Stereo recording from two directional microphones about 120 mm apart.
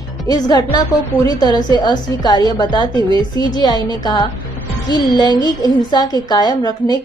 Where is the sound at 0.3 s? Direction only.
35° left (ahead or behind).